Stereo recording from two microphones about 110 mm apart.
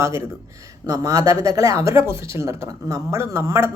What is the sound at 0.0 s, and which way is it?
Speech, 25° right (ahead or behind).